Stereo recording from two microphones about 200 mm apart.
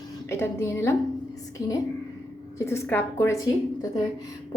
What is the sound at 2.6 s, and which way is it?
Speech, 15° left (ahead or behind).